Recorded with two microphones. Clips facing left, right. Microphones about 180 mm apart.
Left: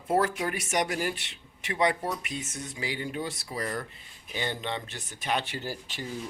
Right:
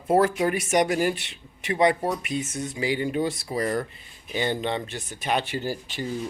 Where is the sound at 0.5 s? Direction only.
15° right (ahead or behind).